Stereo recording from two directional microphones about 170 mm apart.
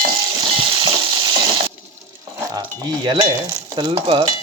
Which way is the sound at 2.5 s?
20° right (ahead or behind).